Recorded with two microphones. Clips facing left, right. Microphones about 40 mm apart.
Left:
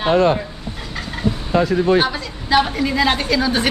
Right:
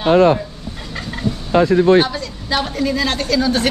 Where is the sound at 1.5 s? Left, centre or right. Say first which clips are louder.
Right 4 dB; right.